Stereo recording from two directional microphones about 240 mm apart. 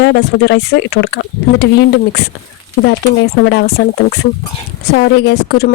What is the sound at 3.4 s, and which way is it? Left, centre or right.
Speech, left.